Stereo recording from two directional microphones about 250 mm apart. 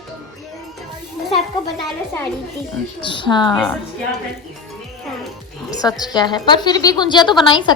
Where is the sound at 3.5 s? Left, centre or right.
Centre.